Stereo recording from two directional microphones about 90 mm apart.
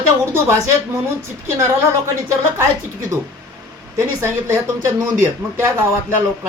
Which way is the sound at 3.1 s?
35° right (ahead or behind).